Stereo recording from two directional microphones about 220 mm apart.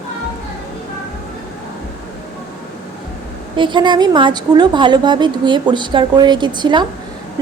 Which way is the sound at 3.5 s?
20° right (ahead or behind).